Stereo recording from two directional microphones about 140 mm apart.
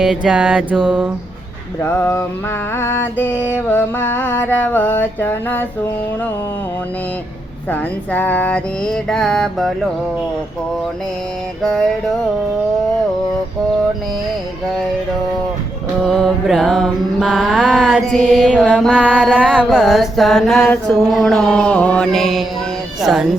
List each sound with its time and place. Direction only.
0.0 s music: 5° right (ahead or behind)
1.8 s music: 15° left (ahead or behind)
7.7 s music: 10° left (ahead or behind)
11.6 s music: 5° left (ahead or behind)
16.0 s music: centre (ahead or behind)